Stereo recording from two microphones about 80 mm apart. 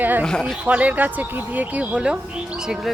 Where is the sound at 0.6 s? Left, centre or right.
Centre.